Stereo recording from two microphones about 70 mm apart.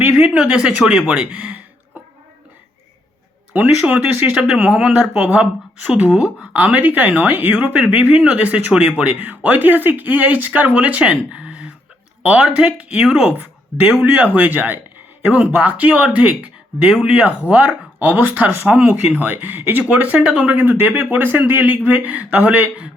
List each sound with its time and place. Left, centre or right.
0.2 s speech: centre
3.5 s speech: right
6.5 s speech: right
9.1 s speech: right
13.3 s speech: right